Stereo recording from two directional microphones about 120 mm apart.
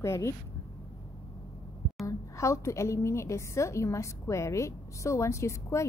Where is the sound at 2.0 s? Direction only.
25° left (ahead or behind).